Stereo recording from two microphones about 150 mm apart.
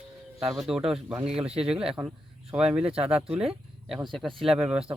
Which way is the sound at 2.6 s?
40° right (ahead or behind).